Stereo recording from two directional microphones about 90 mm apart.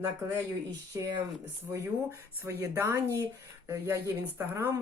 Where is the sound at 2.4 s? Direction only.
25° right (ahead or behind).